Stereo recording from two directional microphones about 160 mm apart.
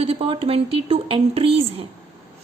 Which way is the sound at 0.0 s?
35° right (ahead or behind).